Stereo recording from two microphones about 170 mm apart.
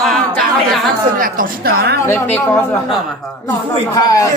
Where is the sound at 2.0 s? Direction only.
10° left (ahead or behind).